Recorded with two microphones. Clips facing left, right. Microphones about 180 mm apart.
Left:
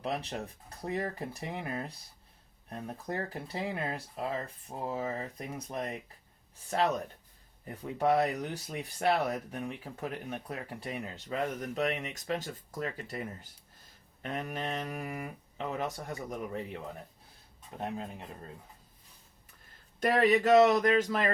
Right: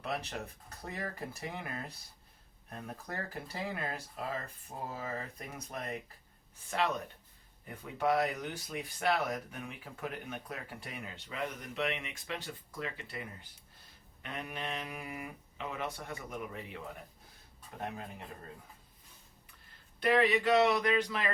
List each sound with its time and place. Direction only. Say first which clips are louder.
0.0 s speech: left 3 dB; 30° left (ahead or behind)
20.0 s speech: left 3 dB; 45° left (ahead or behind)